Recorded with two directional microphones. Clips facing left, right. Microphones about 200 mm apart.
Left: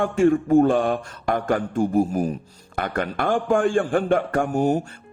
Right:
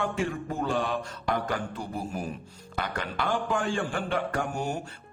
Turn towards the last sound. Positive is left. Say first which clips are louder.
# left 9 dB
turn(degrees=50)  # may be behind; listen again after turning